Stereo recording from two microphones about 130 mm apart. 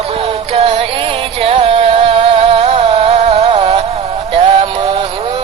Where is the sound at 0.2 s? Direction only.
50° right (ahead or behind).